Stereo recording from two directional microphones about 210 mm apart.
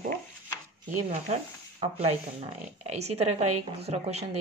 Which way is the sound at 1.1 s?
30° right (ahead or behind).